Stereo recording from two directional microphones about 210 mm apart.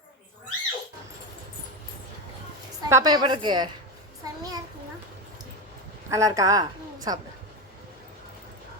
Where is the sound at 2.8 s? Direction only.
15° right (ahead or behind).